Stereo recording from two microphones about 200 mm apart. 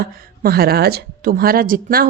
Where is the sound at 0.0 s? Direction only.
50° right (ahead or behind).